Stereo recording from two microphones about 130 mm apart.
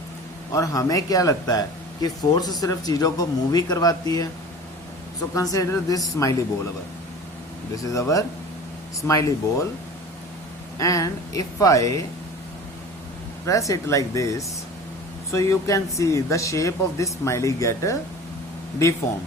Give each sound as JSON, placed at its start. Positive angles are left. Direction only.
{"t": 0.5, "sound": "speech", "side_deg": 25}
{"t": 5.3, "sound": "speech", "side_deg": 25}
{"t": 7.8, "sound": "speech", "side_deg": 25}
{"t": 10.8, "sound": "speech", "side_deg": 25}
{"t": 13.4, "sound": "speech", "side_deg": 25}